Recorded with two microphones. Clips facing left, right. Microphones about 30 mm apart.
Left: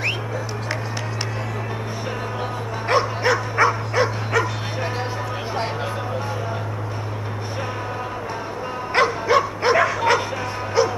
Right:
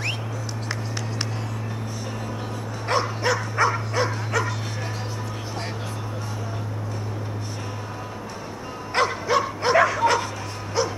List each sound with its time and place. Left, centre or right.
2.9 s dog: centre
8.9 s bow-wow: centre